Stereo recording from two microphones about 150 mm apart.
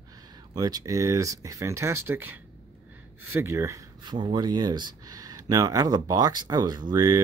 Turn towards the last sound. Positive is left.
turn(degrees=-25)  # may be behind; listen again after turning